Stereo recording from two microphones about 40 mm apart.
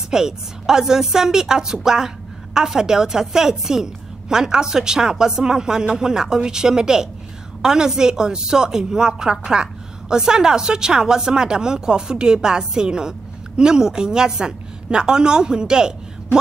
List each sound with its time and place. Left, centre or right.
0.1 s a woman's voice: centre